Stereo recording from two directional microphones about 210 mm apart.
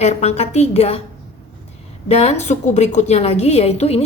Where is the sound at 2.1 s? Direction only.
30° left (ahead or behind).